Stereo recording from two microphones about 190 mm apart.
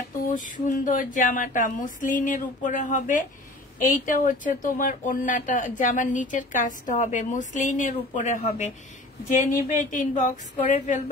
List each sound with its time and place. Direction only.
0.3 s a woman's voice: 45° left (ahead or behind)